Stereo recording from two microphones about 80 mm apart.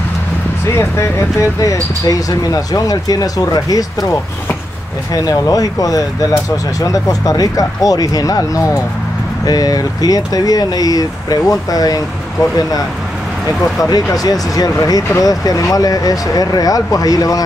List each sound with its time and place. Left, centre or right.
0.7 s speech: left
5.1 s speech: left